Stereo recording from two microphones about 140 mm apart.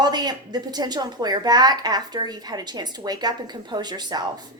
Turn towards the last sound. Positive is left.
turn(degrees=-30)  # may be behind; listen again after turning